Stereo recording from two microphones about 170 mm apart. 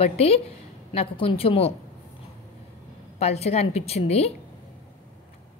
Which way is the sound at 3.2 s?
40° left (ahead or behind).